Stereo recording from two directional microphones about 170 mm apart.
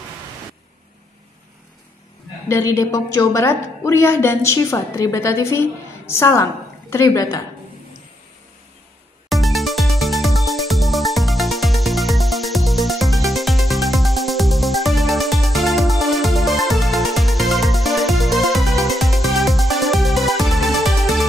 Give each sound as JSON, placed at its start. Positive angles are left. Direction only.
{"t": 2.8, "sound": "a woman's voice", "side_deg": 20}
{"t": 9.3, "sound": "music", "side_deg": 0}